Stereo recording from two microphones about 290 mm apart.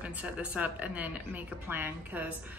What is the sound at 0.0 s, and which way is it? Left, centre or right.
A woman's voice, centre.